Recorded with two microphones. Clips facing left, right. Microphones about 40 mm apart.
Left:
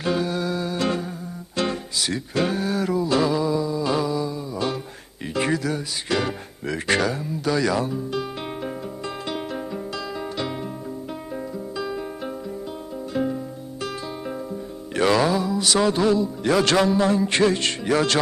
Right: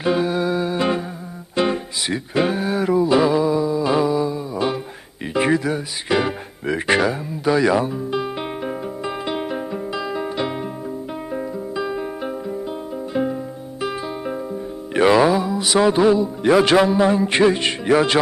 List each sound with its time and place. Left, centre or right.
0.0 s music: centre
14.9 s speech: centre